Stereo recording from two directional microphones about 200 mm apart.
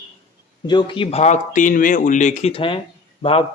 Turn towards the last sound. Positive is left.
turn(degrees=25)  # may be behind; listen again after turning